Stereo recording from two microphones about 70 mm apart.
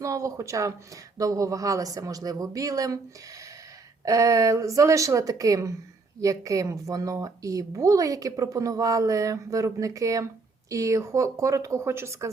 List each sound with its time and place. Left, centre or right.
0.0 s speech: right
4.0 s a woman's voice: right